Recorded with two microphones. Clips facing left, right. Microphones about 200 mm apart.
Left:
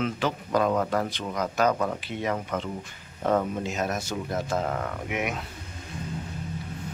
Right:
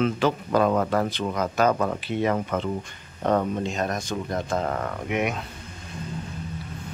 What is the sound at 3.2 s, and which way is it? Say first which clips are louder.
Speech: right 2 dB; 5° left (ahead or behind).